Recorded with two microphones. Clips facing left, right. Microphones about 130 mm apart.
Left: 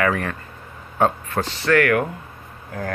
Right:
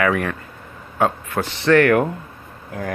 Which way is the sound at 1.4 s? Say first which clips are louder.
Right 4 dB; 20° right (ahead or behind).